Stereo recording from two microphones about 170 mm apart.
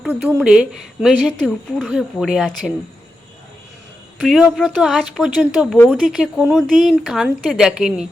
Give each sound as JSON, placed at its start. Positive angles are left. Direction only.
{"t": 0.0, "sound": "a woman's voice", "side_deg": -10}
{"t": 4.2, "sound": "a woman's voice", "side_deg": 0}